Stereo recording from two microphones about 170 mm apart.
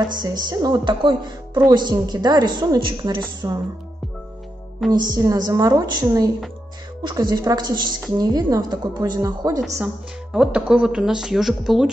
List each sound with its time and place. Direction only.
0.2 s a woman's voice: 25° right (ahead or behind)
4.9 s a woman's voice: 25° right (ahead or behind)
10.3 s speech: 5° right (ahead or behind)